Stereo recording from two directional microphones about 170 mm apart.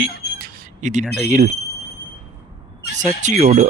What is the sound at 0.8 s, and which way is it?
Speech, 45° right (ahead or behind).